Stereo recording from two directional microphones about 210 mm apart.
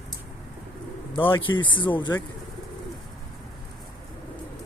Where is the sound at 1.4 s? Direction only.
20° left (ahead or behind).